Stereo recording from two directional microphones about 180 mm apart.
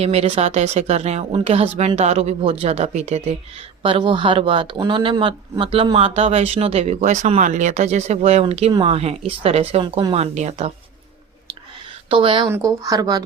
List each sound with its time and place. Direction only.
0.0 s speech: 35° right (ahead or behind)
12.0 s speech: 30° right (ahead or behind)
12.5 s speech: 15° right (ahead or behind)